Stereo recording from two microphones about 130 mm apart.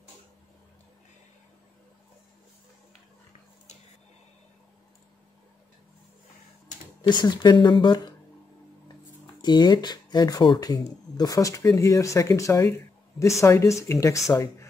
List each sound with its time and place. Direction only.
7.0 s speech: 35° left (ahead or behind)
9.4 s speech: 35° left (ahead or behind)